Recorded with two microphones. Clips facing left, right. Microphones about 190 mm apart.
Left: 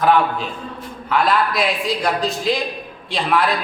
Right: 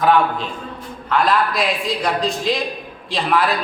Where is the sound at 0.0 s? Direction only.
Centre (ahead or behind).